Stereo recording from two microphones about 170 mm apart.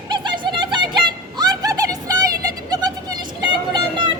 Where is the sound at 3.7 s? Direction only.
25° right (ahead or behind).